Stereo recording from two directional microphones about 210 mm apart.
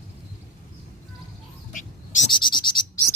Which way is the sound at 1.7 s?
35° left (ahead or behind).